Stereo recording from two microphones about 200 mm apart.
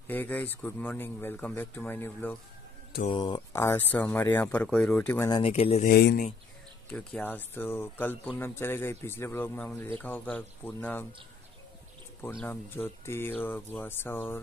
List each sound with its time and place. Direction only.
0.0 s a man's voice: 10° left (ahead or behind)
3.1 s a man's voice: 20° left (ahead or behind)
5.4 s speech: 30° left (ahead or behind)
5.9 s speech: 50° left (ahead or behind)
6.9 s a man's voice: 5° left (ahead or behind)
12.4 s a man's voice: 10° left (ahead or behind)